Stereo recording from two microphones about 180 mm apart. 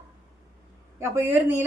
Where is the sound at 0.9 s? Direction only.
15° right (ahead or behind).